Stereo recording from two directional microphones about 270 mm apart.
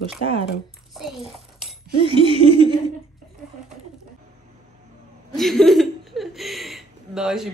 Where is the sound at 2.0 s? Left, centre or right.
Centre.